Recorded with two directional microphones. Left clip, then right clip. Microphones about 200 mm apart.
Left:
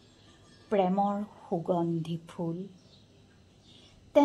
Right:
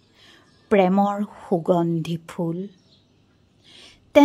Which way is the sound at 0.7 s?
40° right (ahead or behind).